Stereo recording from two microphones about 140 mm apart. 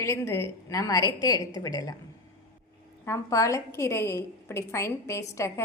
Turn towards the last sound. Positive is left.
turn(degrees=20)  # may be behind; listen again after turning